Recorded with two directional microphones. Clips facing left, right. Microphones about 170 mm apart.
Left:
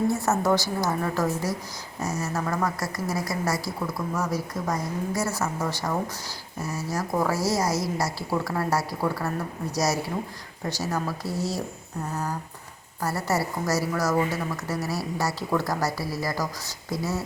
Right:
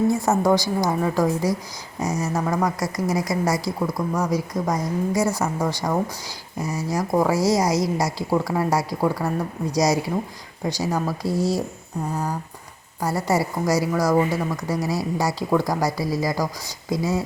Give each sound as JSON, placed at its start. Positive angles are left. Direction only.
{"t": 0.1, "sound": "a woman's voice", "side_deg": -15}
{"t": 13.0, "sound": "a woman's voice", "side_deg": -15}